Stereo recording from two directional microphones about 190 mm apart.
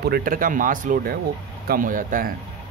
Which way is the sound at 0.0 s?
50° right (ahead or behind).